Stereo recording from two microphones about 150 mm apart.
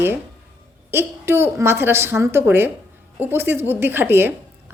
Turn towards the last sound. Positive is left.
turn(degrees=-15)  # may be behind; listen again after turning